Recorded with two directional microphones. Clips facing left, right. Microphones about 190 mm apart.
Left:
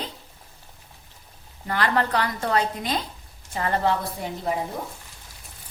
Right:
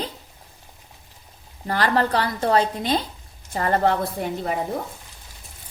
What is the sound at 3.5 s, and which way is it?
A woman's voice, 45° right (ahead or behind).